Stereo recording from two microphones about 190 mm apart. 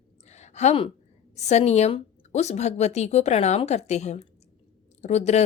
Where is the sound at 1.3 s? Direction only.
35° left (ahead or behind).